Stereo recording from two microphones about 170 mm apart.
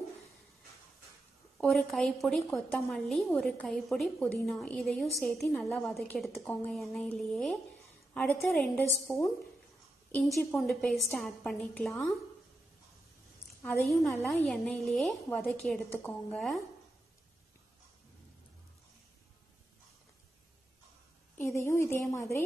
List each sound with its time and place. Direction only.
1.6 s a woman's voice: 5° left (ahead or behind)
13.6 s a woman's voice: centre (ahead or behind)
21.4 s a woman's voice: 15° left (ahead or behind)